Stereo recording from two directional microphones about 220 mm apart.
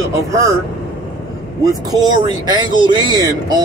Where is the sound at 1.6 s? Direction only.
15° right (ahead or behind).